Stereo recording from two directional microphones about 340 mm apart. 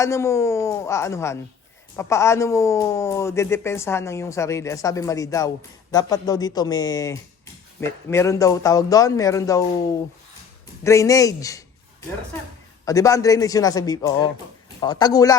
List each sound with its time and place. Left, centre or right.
0.0 s a man's voice: centre